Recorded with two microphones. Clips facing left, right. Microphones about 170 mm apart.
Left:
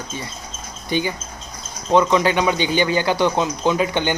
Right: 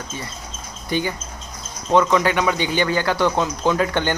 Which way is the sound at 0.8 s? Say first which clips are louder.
Left 1 dB; 25° left (ahead or behind).